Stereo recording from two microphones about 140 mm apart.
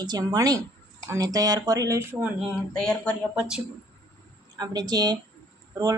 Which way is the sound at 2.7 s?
5° left (ahead or behind).